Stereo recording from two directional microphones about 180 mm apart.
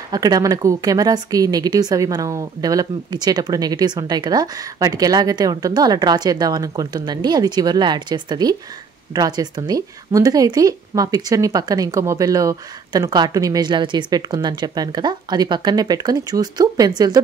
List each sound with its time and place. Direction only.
0.1 s a woman's voice: 20° right (ahead or behind)